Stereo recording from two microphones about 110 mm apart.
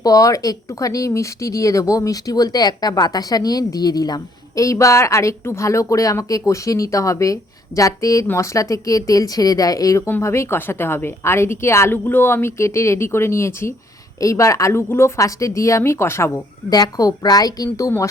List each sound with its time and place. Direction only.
0.0 s a woman's voice: 35° left (ahead or behind)
16.6 s speech: 35° left (ahead or behind)